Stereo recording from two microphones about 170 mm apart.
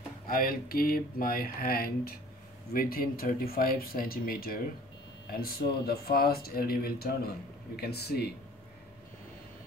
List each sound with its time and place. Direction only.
0.3 s speech: 60° left (ahead or behind)